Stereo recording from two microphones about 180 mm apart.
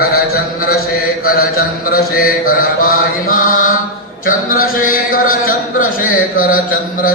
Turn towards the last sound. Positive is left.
turn(degrees=50)  # may be behind; listen again after turning